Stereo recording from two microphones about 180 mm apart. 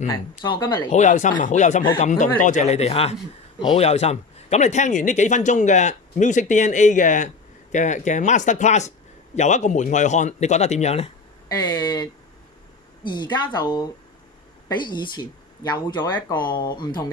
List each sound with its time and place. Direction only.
0.0 s speech: 20° left (ahead or behind)
0.9 s a man's voice: 40° left (ahead or behind)
11.4 s speech: 25° left (ahead or behind)